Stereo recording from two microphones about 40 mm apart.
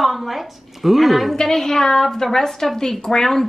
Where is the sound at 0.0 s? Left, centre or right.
Centre.